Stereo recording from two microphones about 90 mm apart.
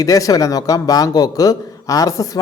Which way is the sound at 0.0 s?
40° left (ahead or behind).